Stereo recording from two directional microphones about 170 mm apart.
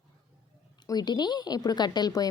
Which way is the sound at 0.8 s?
25° left (ahead or behind).